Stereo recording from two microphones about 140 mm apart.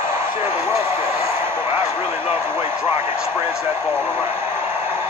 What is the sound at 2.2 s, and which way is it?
Speech, 15° right (ahead or behind).